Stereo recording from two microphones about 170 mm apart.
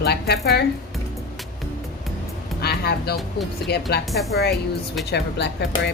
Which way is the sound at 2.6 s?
70° left (ahead or behind).